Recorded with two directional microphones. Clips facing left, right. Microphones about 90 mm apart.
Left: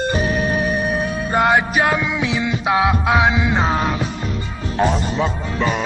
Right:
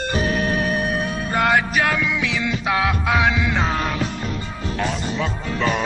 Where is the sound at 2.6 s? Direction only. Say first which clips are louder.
Left 5 dB; 20° left (ahead or behind).